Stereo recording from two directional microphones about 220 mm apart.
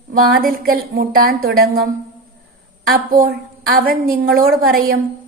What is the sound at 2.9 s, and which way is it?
A woman's voice, 40° right (ahead or behind).